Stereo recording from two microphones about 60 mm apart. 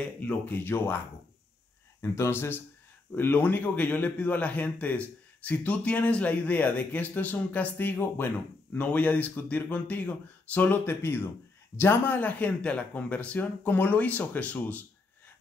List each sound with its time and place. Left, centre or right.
0.2 s a man's voice: left
0.7 s speech: left
2.0 s speech: left
3.2 s a man's voice: left
8.7 s a man's voice: left
10.9 s speech: left
12.2 s a man's voice: left